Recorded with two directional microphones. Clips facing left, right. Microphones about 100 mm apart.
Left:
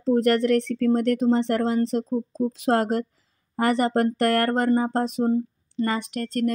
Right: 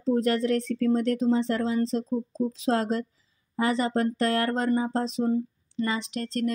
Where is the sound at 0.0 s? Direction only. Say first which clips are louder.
Left 4 dB; 65° left (ahead or behind).